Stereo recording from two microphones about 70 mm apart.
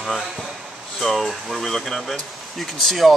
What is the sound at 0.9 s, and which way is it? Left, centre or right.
Speech, centre.